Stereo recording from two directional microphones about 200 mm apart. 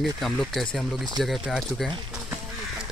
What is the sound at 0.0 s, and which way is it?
Speech, centre (ahead or behind).